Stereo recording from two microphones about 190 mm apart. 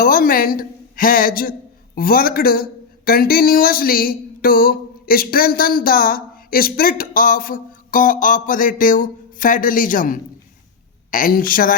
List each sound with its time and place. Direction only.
0.0 s a woman's voice: 50° left (ahead or behind)